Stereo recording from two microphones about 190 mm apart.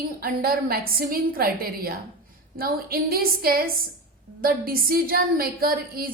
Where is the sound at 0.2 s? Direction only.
50° right (ahead or behind).